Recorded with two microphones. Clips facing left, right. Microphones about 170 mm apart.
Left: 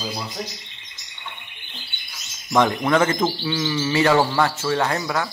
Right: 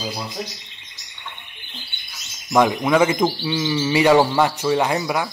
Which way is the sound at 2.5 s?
10° right (ahead or behind).